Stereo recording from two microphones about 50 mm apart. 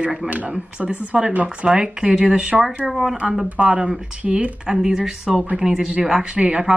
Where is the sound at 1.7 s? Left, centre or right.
Centre.